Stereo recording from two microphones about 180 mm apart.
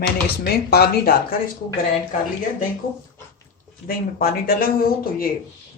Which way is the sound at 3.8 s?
55° left (ahead or behind).